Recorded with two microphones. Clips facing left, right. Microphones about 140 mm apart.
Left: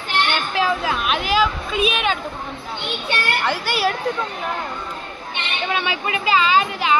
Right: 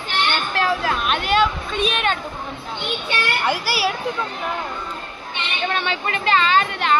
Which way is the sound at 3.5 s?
5° right (ahead or behind).